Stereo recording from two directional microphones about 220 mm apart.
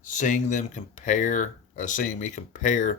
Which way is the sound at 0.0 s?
35° left (ahead or behind).